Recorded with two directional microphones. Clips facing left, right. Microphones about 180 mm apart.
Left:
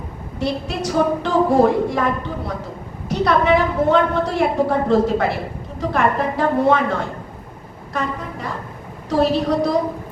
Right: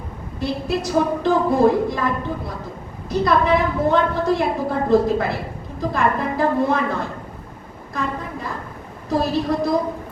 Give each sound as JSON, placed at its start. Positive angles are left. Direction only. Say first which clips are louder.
{"t": 0.3, "sound": "a woman's voice", "louder": "even", "side_deg": 70}
{"t": 3.1, "sound": "a woman's voice", "louder": "left 1 dB", "side_deg": 70}